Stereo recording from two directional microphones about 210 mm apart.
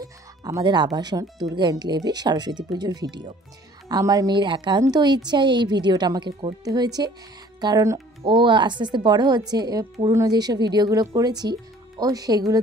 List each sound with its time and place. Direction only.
0.0 s music: 15° right (ahead or behind)
0.9 s a woman's voice: 20° right (ahead or behind)